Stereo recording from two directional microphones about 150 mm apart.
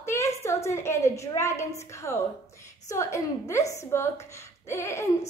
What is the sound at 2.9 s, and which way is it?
A woman's voice, 20° left (ahead or behind).